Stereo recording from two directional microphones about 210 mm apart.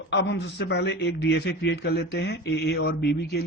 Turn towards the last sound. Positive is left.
turn(degrees=50)  # may be behind; listen again after turning